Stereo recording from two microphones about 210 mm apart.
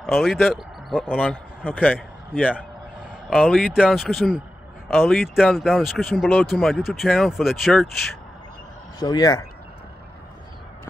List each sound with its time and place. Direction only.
0.0 s a man's voice: centre (ahead or behind)
9.0 s speech: 20° left (ahead or behind)